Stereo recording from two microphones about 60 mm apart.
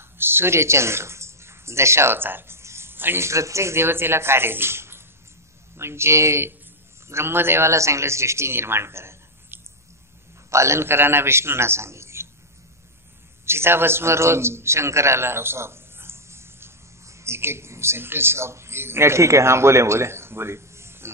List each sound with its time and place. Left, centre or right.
0.2 s speech: right
3.3 s speech: right
13.5 s a man's voice: right